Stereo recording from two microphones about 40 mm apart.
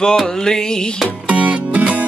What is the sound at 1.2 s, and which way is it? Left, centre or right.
Music, right.